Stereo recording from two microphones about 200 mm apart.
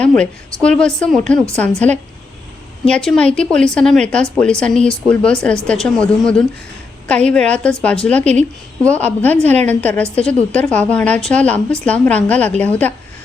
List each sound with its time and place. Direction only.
0.0 s a woman's voice: 5° left (ahead or behind)
9.4 s a woman's voice: 35° right (ahead or behind)
9.6 s a woman's voice: 5° left (ahead or behind)